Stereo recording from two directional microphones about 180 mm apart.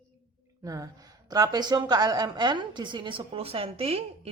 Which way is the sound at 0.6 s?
20° right (ahead or behind).